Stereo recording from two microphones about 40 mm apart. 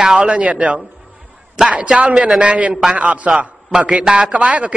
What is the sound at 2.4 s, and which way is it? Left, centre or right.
A man's voice, right.